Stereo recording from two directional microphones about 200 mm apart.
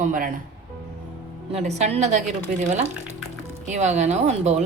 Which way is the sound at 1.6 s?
35° right (ahead or behind).